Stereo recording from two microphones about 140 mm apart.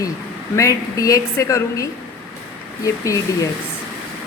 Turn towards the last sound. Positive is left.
turn(degrees=25)  # may be behind; listen again after turning